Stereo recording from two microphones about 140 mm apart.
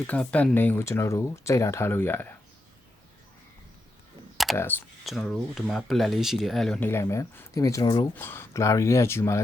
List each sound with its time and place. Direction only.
0.1 s speech: 10° left (ahead or behind)
4.5 s speech: 15° left (ahead or behind)
5.0 s speech: centre (ahead or behind); by 8.0 s 30° left (ahead or behind)
8.1 s speech: 15° left (ahead or behind)